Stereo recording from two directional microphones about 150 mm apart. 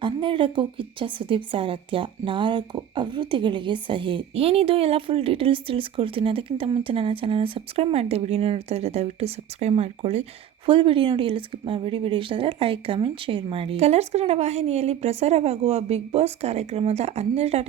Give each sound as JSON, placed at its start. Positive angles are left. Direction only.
{"t": 0.0, "sound": "speech", "side_deg": -35}